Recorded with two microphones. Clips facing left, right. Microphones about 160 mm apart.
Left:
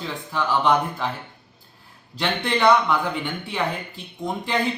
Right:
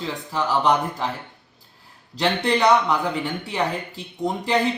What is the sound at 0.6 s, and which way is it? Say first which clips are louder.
Speech: even; 35° right (ahead or behind).